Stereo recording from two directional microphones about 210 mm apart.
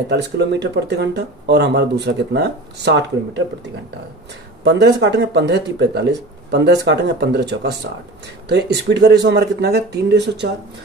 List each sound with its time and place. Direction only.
0.1 s speech: 55° right (ahead or behind)
4.6 s speech: 55° right (ahead or behind)